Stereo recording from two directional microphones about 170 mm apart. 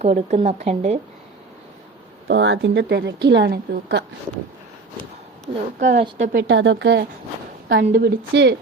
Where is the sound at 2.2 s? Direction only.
90° right.